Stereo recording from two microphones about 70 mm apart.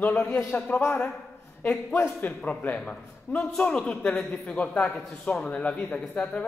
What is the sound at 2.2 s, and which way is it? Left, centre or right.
A man's voice, centre.